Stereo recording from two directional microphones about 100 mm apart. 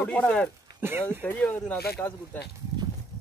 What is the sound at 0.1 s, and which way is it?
Speech, 10° left (ahead or behind).